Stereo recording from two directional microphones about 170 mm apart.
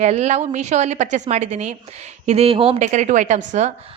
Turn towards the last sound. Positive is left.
turn(degrees=-45)  # may be behind; listen again after turning